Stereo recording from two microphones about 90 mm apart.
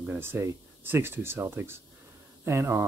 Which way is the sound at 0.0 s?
25° right (ahead or behind).